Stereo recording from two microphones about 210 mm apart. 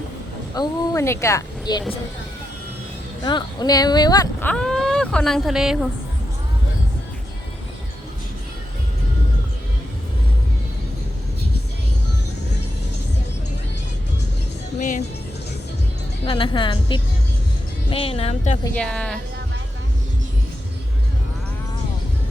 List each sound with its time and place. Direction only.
0.5 s a woman's voice: 15° left (ahead or behind)
3.2 s speech: 20° left (ahead or behind); by 5.7 s centre (ahead or behind)
14.8 s speech: 35° left (ahead or behind)
16.2 s a woman's voice: 25° left (ahead or behind)
18.6 s speech: 5° left (ahead or behind)